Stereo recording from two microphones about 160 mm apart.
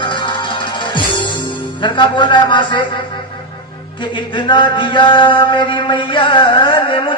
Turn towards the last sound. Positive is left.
turn(degrees=30)  # may be behind; listen again after turning